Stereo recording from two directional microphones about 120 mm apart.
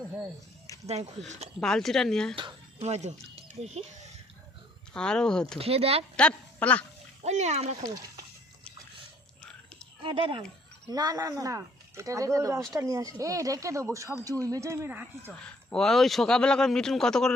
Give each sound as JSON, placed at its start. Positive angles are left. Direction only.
{"t": 1.6, "sound": "speech", "side_deg": 5}
{"t": 2.8, "sound": "speech", "side_deg": -65}
{"t": 4.9, "sound": "speech", "side_deg": 5}
{"t": 5.5, "sound": "speech", "side_deg": -55}
{"t": 6.1, "sound": "a woman's voice", "side_deg": 10}
{"t": 7.3, "sound": "speech", "side_deg": -70}
{"t": 7.8, "sound": "speech", "side_deg": -30}
{"t": 10.0, "sound": "speech", "side_deg": -45}
{"t": 10.8, "sound": "speech", "side_deg": -30}
{"t": 15.3, "sound": "speech", "side_deg": 5}